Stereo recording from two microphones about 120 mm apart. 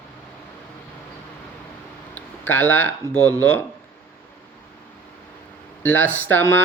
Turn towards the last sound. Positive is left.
turn(degrees=20)  # may be behind; listen again after turning